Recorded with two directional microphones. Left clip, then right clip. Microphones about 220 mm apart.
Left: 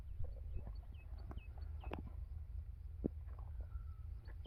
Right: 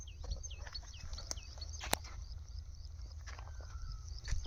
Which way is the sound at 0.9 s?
65° right (ahead or behind).